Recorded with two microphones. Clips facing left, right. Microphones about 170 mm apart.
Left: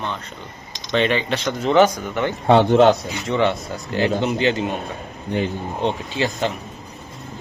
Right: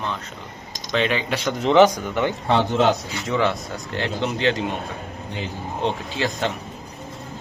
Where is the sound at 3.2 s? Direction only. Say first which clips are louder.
Left 2 dB; centre (ahead or behind).